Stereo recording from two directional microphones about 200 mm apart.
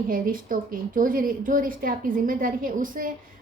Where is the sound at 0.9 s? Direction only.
45° right (ahead or behind).